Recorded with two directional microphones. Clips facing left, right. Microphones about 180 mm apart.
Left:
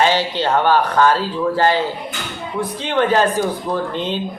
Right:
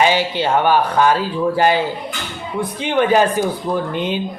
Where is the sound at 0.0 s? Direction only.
10° right (ahead or behind).